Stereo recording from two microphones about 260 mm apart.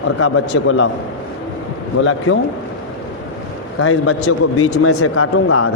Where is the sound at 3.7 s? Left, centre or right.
Left.